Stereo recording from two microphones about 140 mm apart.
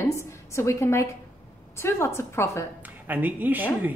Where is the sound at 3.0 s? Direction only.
10° right (ahead or behind).